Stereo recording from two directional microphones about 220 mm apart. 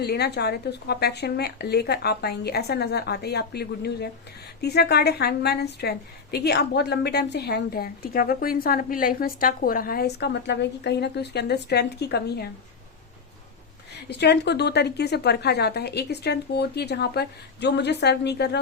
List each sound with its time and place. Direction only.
0.0 s a woman's voice: 45° left (ahead or behind)
14.1 s a woman's voice: 50° left (ahead or behind)